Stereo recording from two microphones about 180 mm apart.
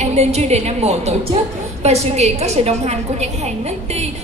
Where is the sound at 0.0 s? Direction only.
40° right (ahead or behind).